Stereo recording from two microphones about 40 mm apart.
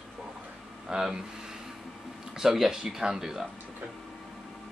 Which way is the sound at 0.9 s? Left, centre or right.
Centre.